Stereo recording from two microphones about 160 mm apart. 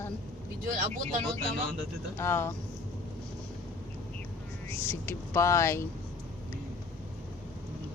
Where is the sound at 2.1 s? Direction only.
15° left (ahead or behind).